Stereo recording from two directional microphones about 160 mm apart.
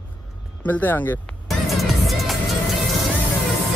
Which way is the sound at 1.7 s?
Centre (ahead or behind).